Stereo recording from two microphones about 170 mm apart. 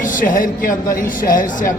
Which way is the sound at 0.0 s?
50° left (ahead or behind).